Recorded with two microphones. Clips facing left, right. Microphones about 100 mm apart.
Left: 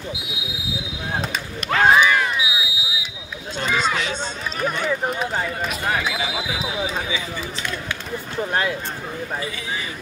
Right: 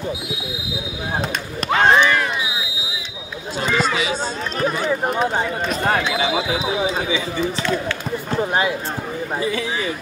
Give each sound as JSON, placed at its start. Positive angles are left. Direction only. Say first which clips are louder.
{"t": 1.8, "sound": "a sound", "louder": "even", "side_deg": 5}
{"t": 3.6, "sound": "speech", "louder": "right 2 dB", "side_deg": -5}
{"t": 6.2, "sound": "speech", "louder": "right 6 dB", "side_deg": -25}
{"t": 8.4, "sound": "speech", "louder": "right 2 dB", "side_deg": -10}